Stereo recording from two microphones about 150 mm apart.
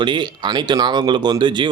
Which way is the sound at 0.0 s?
30° right (ahead or behind).